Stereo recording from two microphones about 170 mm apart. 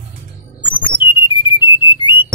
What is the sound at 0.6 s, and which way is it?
Music, 30° left (ahead or behind).